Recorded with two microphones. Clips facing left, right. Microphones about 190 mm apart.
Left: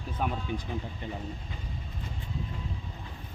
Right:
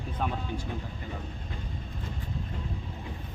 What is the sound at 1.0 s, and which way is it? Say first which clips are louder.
Speech: left 2 dB; 25° left (ahead or behind).